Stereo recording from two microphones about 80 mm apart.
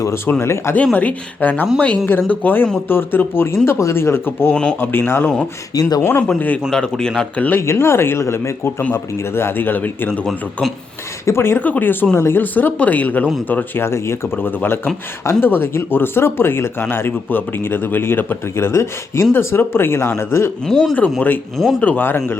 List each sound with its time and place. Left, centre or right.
0.3 s speech: left
0.9 s speech: centre
4.5 s speech: centre
4.9 s speech: left
5.7 s speech: left
6.0 s speech: left
6.7 s speech: centre
7.2 s speech: centre
7.6 s speech: left
11.3 s speech: left
20.7 s speech: centre
21.2 s speech: left